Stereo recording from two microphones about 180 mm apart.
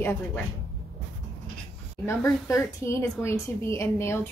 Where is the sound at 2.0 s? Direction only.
15° left (ahead or behind).